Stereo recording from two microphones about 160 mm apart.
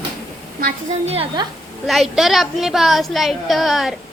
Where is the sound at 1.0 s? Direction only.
35° right (ahead or behind).